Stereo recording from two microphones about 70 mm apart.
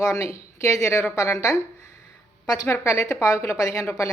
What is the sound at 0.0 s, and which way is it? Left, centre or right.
A woman's voice, left.